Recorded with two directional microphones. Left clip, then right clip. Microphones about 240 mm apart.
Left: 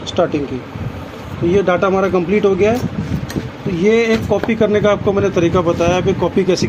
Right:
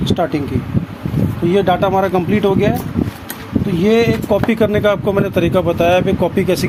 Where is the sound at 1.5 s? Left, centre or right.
Right.